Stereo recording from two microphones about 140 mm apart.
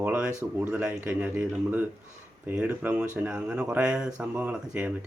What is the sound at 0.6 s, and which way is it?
Speech, 10° right (ahead or behind).